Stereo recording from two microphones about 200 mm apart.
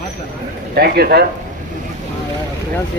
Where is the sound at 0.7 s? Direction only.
50° right (ahead or behind).